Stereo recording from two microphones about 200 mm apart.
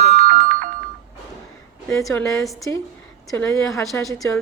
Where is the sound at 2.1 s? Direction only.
15° left (ahead or behind).